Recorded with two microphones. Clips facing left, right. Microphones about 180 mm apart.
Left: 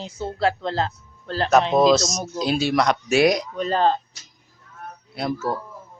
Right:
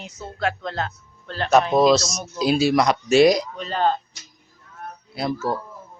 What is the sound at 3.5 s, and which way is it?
Speech, 40° left (ahead or behind).